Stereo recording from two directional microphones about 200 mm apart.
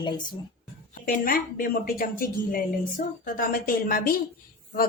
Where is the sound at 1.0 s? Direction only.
45° left (ahead or behind).